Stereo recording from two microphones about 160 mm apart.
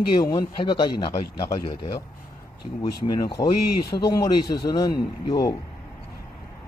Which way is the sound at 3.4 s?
20° left (ahead or behind).